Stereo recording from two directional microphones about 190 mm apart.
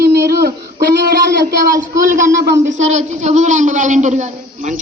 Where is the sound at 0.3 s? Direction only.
55° right (ahead or behind).